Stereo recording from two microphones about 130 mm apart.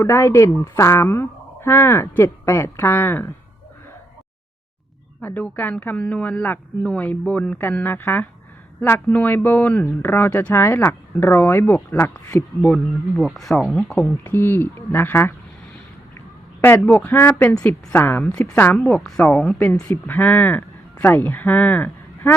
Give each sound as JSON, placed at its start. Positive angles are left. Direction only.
{"t": 0.0, "sound": "speech", "side_deg": 20}
{"t": 5.2, "sound": "speech", "side_deg": 15}
{"t": 12.6, "sound": "speech", "side_deg": 5}
{"t": 14.0, "sound": "speech", "side_deg": 15}